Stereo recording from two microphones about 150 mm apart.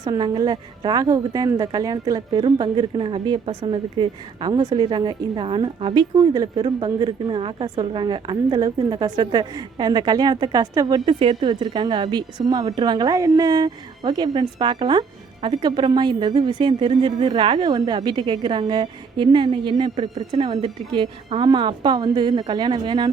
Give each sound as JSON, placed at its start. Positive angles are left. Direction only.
{"t": 0.0, "sound": "a woman's voice", "side_deg": -30}
{"t": 11.0, "sound": "a woman's voice", "side_deg": -40}